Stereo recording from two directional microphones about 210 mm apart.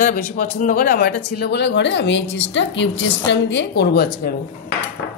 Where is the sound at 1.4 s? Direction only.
55° left (ahead or behind).